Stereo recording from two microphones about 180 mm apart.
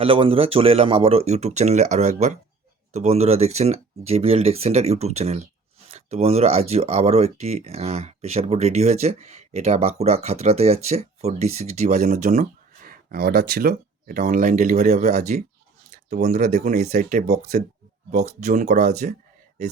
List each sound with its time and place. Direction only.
0.0 s speech: 30° right (ahead or behind)
16.7 s speech: 55° right (ahead or behind); by 18.9 s 40° right (ahead or behind)